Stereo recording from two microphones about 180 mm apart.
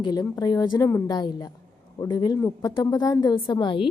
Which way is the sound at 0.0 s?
20° left (ahead or behind).